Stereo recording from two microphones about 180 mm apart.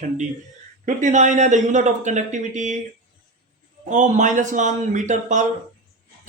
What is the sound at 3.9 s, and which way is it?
Speech, 45° right (ahead or behind).